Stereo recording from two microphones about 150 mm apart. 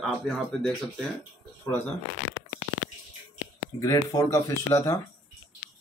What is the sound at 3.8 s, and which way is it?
Speech, 20° left (ahead or behind).